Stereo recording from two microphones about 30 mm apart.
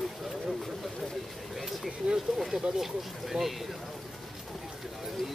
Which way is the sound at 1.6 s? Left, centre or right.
Centre.